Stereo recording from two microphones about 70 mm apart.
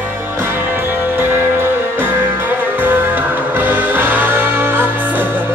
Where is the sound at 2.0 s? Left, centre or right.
Right.